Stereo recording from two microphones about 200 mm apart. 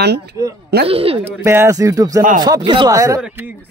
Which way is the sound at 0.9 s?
30° right (ahead or behind).